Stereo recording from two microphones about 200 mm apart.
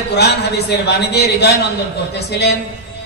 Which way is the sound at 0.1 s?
55° left (ahead or behind).